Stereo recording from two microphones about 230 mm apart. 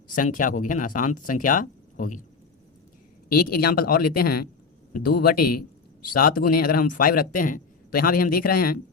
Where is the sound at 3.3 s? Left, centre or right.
Left.